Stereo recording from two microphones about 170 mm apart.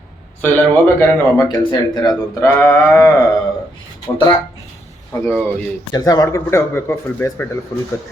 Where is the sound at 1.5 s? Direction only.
20° left (ahead or behind).